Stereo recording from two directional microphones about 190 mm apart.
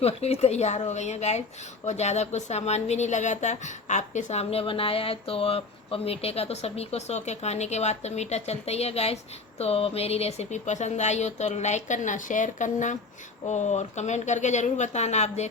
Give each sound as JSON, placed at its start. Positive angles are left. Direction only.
{"t": 0.0, "sound": "a woman's voice", "side_deg": 30}